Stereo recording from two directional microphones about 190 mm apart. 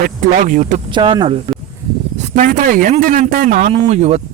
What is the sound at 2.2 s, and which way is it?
Speech, 45° right (ahead or behind).